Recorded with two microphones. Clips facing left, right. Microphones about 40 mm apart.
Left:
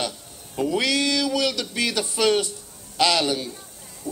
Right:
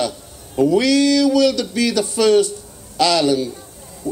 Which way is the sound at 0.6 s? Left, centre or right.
Left.